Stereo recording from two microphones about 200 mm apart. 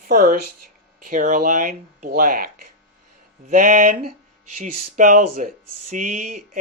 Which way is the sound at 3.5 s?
40° right (ahead or behind).